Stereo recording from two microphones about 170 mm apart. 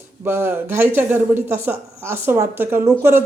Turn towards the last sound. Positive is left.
turn(degrees=-15)  # may be behind; listen again after turning